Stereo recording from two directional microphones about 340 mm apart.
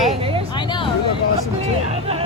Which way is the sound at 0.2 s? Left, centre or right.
Centre.